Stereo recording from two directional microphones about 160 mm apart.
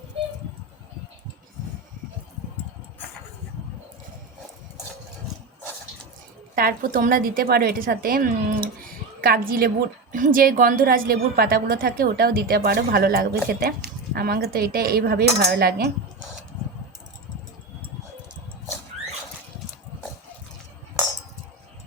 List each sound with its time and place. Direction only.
6.6 s a woman's voice: 60° right (ahead or behind)